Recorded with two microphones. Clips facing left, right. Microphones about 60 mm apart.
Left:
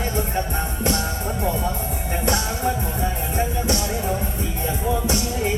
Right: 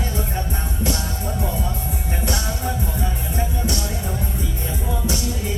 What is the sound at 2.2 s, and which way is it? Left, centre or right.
Music, left.